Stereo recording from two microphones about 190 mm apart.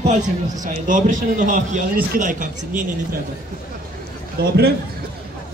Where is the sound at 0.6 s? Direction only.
40° right (ahead or behind).